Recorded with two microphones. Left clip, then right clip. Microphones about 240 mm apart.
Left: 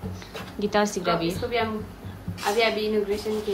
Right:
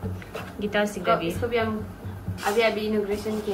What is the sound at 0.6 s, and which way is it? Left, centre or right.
Speech, centre.